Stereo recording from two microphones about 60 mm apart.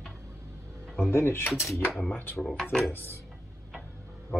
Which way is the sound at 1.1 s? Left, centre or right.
Left.